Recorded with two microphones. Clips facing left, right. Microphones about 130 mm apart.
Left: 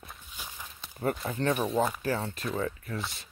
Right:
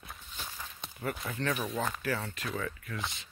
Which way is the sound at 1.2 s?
25° left (ahead or behind).